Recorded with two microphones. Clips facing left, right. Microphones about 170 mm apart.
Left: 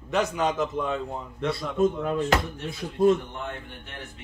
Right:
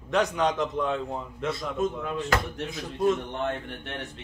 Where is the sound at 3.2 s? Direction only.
70° right (ahead or behind).